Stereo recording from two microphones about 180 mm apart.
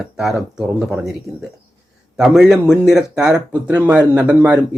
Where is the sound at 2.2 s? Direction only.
5° right (ahead or behind).